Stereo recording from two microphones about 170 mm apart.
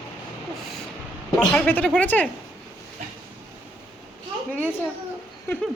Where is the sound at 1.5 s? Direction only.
10° left (ahead or behind).